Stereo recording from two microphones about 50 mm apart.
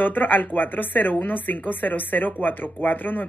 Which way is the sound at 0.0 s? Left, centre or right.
Left.